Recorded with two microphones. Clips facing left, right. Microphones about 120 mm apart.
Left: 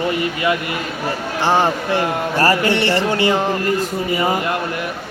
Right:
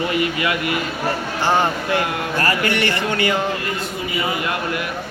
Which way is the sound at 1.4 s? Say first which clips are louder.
Left 2 dB; 30° left (ahead or behind).